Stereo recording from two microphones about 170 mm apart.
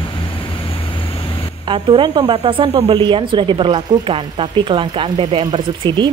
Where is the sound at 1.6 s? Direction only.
30° right (ahead or behind).